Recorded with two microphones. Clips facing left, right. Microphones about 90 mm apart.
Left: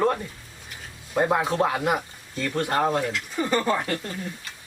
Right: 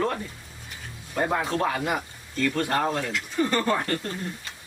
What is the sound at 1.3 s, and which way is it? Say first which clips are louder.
Speech: left 2 dB; 10° left (ahead or behind).